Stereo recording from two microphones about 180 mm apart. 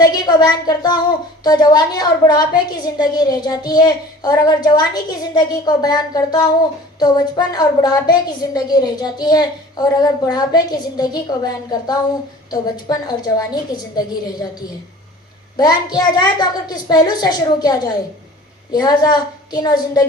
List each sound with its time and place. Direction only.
0.0 s a woman's voice: 25° left (ahead or behind)
15.5 s a woman's voice: 20° left (ahead or behind)